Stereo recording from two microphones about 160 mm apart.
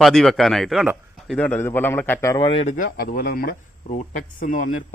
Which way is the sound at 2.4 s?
40° left (ahead or behind).